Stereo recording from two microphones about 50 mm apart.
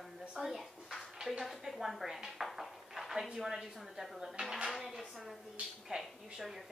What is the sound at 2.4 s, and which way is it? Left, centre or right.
Dishes, centre.